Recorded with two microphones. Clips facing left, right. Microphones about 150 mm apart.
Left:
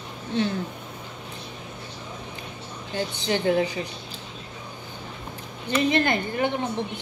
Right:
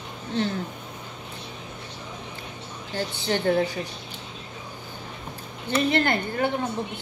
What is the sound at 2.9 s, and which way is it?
Speech, 15° left (ahead or behind).